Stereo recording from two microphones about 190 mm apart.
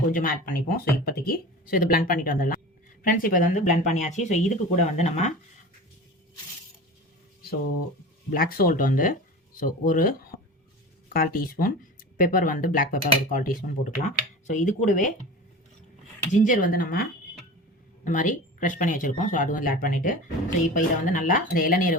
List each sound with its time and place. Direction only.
0.1 s speech: 45° left (ahead or behind)
8.3 s speech: 50° left (ahead or behind)
16.3 s speech: 40° left (ahead or behind)